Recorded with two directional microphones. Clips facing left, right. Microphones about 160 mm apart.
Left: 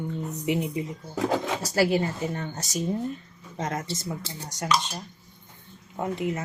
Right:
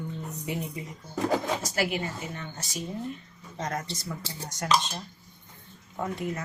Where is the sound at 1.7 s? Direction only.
35° left (ahead or behind).